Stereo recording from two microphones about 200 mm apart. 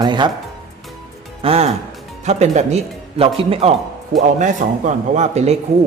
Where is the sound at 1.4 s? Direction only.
30° right (ahead or behind).